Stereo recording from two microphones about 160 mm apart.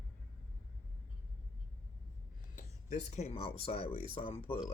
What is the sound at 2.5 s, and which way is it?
Speech, 55° left (ahead or behind).